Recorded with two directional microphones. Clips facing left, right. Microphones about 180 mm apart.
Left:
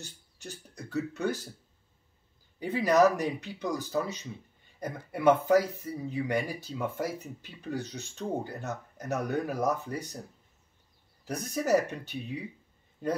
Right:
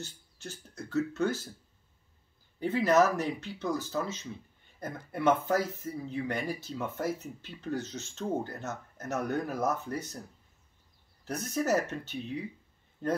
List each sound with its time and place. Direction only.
0.0 s speech: 15° left (ahead or behind)
2.6 s speech: 15° left (ahead or behind)
11.2 s speech: 15° left (ahead or behind)